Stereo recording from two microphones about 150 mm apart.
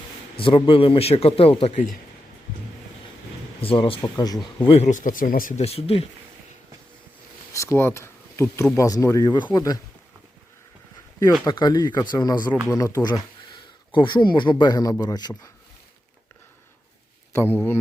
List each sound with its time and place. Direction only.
0.3 s a man's voice: 35° left (ahead or behind)
3.6 s a man's voice: 35° left (ahead or behind)
4.0 s speech: 25° left (ahead or behind)
4.6 s speech: 45° left (ahead or behind); by 5.5 s 65° left (ahead or behind)
5.5 s a man's voice: 45° left (ahead or behind)
7.5 s speech: 20° left (ahead or behind)
11.3 s speech: 25° left (ahead or behind)